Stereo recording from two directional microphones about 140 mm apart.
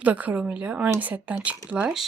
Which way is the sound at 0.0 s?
10° right (ahead or behind).